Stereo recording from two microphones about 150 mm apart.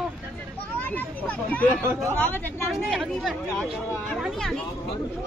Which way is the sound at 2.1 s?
10° left (ahead or behind).